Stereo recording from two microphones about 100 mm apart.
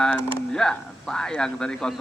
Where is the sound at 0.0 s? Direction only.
5° left (ahead or behind).